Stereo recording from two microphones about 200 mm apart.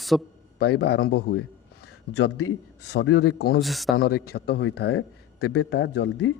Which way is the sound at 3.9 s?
50° left (ahead or behind).